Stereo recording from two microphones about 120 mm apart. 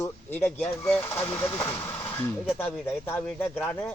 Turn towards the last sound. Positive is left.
turn(degrees=15)  # may be behind; listen again after turning